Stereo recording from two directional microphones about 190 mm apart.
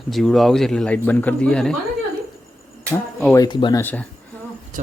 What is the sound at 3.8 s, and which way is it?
Speech, 10° left (ahead or behind).